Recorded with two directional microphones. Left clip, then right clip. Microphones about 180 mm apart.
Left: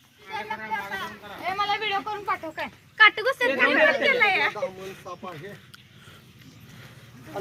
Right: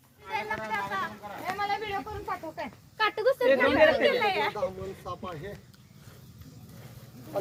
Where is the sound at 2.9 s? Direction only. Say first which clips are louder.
Left 7 dB; 35° left (ahead or behind).